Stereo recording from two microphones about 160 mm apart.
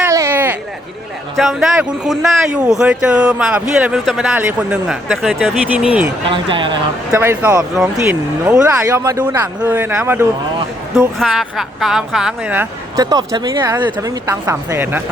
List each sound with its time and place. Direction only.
0.0 s a sound: 15° right (ahead or behind)
1.4 s speech: centre (ahead or behind)
6.2 s speech: 30° right (ahead or behind)
7.1 s speech: 15° right (ahead or behind)
10.9 s speech: centre (ahead or behind)
13.0 s speech: 25° right (ahead or behind)
14.3 s speech: 20° right (ahead or behind)